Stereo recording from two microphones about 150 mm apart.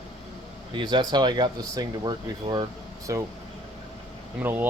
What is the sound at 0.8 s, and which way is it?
Speech, 30° right (ahead or behind).